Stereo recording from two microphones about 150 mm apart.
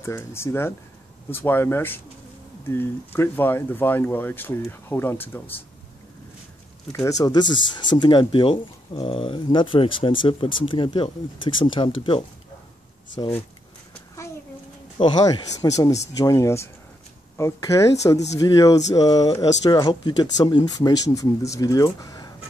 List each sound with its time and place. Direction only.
0.0 s speech: 20° left (ahead or behind)
6.9 s speech: 20° left (ahead or behind)
15.0 s speech: 30° left (ahead or behind)